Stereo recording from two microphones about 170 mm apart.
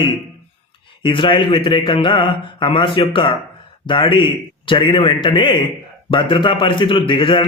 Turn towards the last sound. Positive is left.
turn(degrees=30)  # may be behind; listen again after turning